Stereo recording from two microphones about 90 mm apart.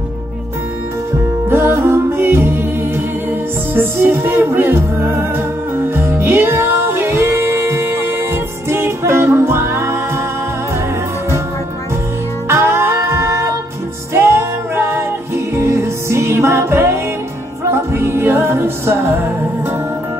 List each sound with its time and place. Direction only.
1.1 s music: 25° right (ahead or behind)
12.4 s music: 30° right (ahead or behind)